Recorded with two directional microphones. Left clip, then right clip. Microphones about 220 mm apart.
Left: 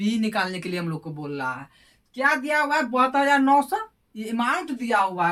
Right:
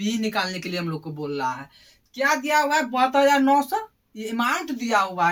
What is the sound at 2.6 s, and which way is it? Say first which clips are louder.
Speech: right 1 dB; 10° left (ahead or behind).